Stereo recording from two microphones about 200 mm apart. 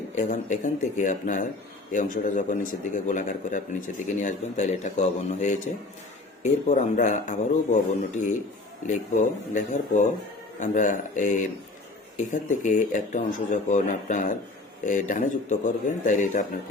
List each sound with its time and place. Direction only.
0.2 s a man's voice: 40° left (ahead or behind)